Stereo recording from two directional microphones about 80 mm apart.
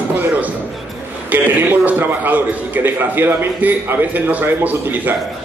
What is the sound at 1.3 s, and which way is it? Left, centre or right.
A man's voice, right.